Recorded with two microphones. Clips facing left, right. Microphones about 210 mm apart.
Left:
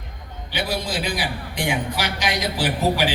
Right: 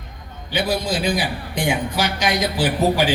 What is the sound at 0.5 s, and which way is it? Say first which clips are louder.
A man's voice: right 4 dB; 45° right (ahead or behind).